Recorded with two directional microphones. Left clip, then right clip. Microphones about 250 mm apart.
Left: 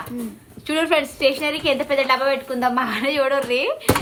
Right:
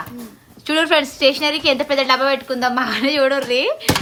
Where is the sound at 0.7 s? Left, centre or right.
Right.